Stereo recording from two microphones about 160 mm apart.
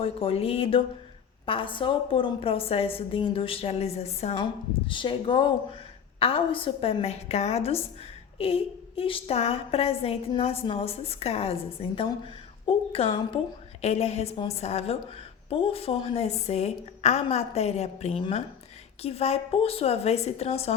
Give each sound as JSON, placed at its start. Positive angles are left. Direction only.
{"t": 0.0, "sound": "a woman's voice", "side_deg": 35}
{"t": 4.9, "sound": "a woman's voice", "side_deg": 30}